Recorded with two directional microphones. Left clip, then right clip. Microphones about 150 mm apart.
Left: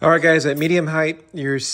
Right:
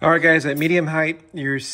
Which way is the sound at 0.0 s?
30° left (ahead or behind).